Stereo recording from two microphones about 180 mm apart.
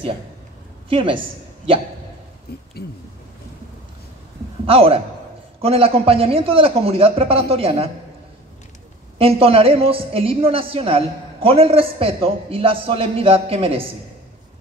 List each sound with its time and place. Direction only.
0.8 s a woman's voice: 30° right (ahead or behind)
2.5 s speech: 60° left (ahead or behind)
4.6 s a woman's voice: 30° right (ahead or behind)
9.2 s a woman's voice: 30° right (ahead or behind)